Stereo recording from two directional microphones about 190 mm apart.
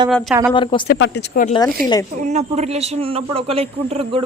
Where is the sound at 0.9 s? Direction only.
70° left (ahead or behind).